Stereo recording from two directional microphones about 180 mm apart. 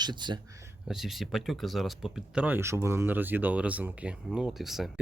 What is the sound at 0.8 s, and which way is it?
Speech, centre (ahead or behind).